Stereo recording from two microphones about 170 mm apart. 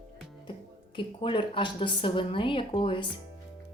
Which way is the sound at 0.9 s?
30° left (ahead or behind).